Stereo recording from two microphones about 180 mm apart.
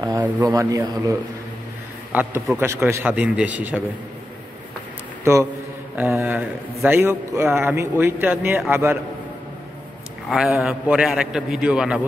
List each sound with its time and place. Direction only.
0.2 s speech: 20° right (ahead or behind)
2.1 s a man's voice: 10° right (ahead or behind)
5.2 s a man's voice: 15° right (ahead or behind)
10.3 s a man's voice: centre (ahead or behind)